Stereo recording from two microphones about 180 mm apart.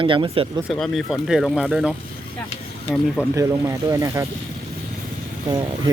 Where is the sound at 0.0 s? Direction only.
30° right (ahead or behind).